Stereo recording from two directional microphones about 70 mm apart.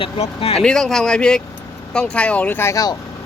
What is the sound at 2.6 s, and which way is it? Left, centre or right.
Speech, left.